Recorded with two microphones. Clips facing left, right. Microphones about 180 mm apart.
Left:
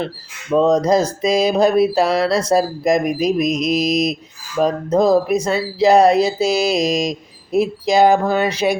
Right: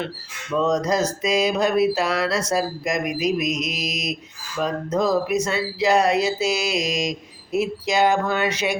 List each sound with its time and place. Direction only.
0.5 s mantra: 30° left (ahead or behind)